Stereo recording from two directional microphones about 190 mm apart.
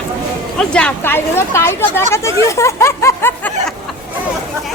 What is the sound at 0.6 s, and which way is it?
Speech, 5° left (ahead or behind).